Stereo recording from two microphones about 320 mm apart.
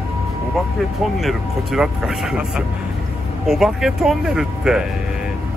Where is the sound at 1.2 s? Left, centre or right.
Centre.